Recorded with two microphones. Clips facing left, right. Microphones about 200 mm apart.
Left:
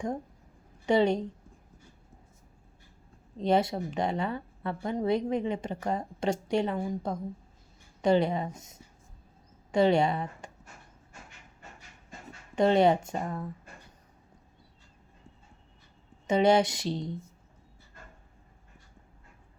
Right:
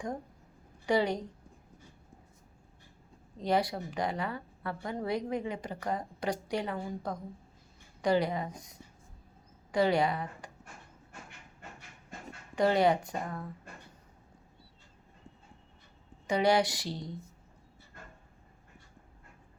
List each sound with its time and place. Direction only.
0.9 s a woman's voice: 25° left (ahead or behind)
3.3 s a woman's voice: 25° left (ahead or behind)
12.5 s a woman's voice: 25° left (ahead or behind)
16.2 s a woman's voice: 25° left (ahead or behind)